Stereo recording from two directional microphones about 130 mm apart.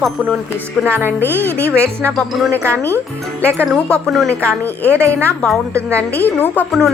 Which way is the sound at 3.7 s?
10° left (ahead or behind).